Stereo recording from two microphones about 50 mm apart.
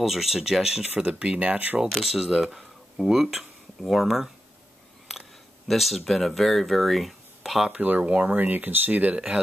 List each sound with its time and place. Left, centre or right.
0.0 s speech: centre
1.0 s speech: right
1.9 s speech: centre
5.7 s speech: centre
7.7 s speech: right